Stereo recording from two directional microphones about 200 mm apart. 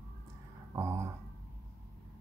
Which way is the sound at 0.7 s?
15° right (ahead or behind).